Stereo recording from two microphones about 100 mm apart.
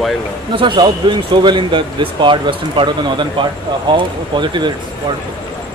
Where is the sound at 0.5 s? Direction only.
50° right (ahead or behind).